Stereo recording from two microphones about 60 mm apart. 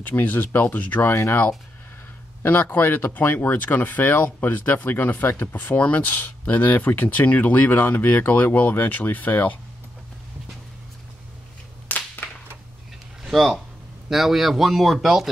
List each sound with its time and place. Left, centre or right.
0.0 s speech: left
2.4 s speech: left
11.9 s clapping: left
13.3 s speech: centre